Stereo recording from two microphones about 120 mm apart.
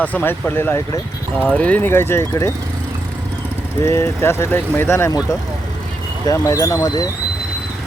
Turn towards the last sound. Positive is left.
turn(degrees=35)  # may be behind; listen again after turning